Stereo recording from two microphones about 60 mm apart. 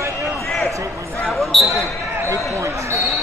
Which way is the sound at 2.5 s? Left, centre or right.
Right.